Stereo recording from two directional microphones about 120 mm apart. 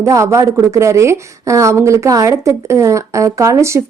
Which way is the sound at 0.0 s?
25° right (ahead or behind).